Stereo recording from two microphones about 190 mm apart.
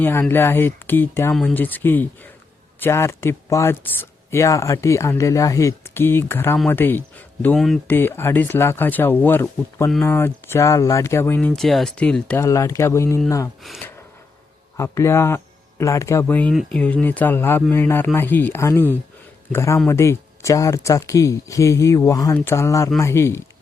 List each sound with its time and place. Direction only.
0.0 s speech: 10° left (ahead or behind)
14.8 s speech: 15° left (ahead or behind)